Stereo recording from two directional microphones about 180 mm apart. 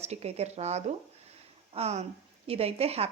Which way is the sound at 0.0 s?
35° right (ahead or behind).